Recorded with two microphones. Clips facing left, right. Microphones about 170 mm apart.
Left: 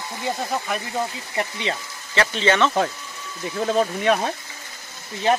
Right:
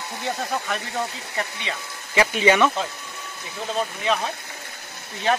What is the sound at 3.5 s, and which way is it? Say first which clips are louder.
Speech: left 6 dB; 55° left (ahead or behind).